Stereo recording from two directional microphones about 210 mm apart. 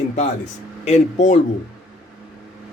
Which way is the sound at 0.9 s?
35° left (ahead or behind).